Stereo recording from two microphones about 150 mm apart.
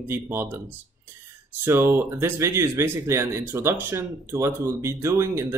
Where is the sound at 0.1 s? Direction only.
15° right (ahead or behind).